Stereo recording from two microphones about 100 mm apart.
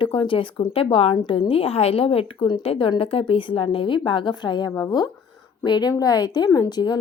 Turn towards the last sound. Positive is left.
turn(degrees=45)  # may be behind; listen again after turning